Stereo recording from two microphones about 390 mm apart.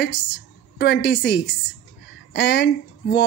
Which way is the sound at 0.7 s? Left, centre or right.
Left.